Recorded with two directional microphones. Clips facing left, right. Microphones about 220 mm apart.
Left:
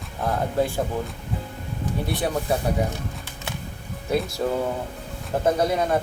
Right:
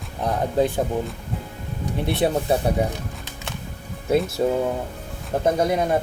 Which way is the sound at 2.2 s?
25° right (ahead or behind).